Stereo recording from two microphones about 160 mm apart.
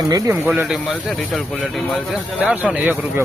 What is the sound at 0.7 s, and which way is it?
Speech, 5° left (ahead or behind).